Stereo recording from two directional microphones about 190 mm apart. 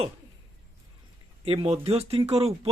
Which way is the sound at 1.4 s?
30° right (ahead or behind).